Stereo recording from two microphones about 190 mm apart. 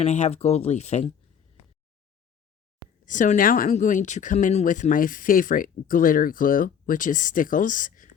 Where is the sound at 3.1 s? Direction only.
40° left (ahead or behind).